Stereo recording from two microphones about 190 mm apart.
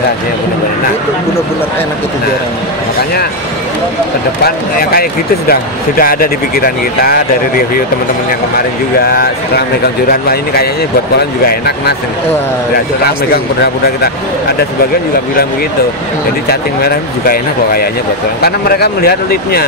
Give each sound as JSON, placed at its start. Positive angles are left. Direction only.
{"t": 5.5, "sound": "speech", "side_deg": 50}
{"t": 9.0, "sound": "speech", "side_deg": 55}
{"t": 16.4, "sound": "speech", "side_deg": 50}